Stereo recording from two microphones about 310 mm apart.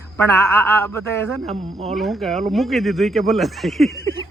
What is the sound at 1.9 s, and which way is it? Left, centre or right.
Speech, centre.